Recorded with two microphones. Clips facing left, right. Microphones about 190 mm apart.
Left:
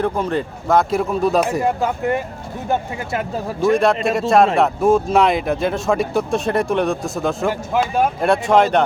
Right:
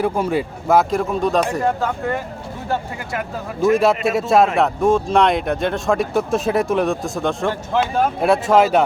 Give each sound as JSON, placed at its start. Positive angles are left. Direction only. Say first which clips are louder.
{"t": 0.0, "sound": "speech", "louder": "right 1 dB", "side_deg": -10}
{"t": 0.9, "sound": "speech", "louder": "left 1 dB", "side_deg": 5}
{"t": 2.6, "sound": "speech", "louder": "left 3 dB", "side_deg": 25}
{"t": 3.7, "sound": "speech", "louder": "even", "side_deg": -5}